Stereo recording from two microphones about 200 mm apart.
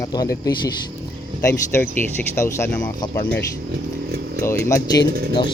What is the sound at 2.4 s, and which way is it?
Speech, 15° left (ahead or behind).